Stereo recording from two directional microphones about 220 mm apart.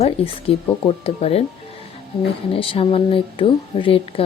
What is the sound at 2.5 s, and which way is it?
Speech, 25° left (ahead or behind).